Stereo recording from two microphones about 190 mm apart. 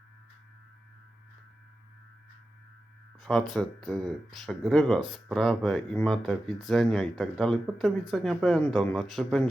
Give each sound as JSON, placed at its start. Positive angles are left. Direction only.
{"t": 3.2, "sound": "speech", "side_deg": 0}